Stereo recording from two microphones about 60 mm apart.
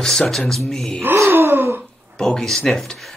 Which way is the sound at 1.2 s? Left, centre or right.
Right.